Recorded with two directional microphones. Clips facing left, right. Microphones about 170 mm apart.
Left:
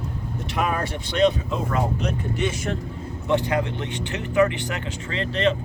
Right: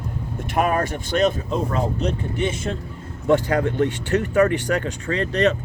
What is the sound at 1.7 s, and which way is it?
Speech, 30° right (ahead or behind).